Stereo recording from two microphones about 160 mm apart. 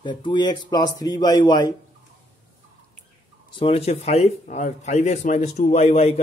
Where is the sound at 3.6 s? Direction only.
40° left (ahead or behind).